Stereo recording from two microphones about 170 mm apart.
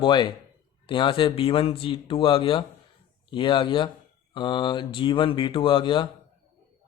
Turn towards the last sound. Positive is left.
turn(degrees=30)  # may be behind; listen again after turning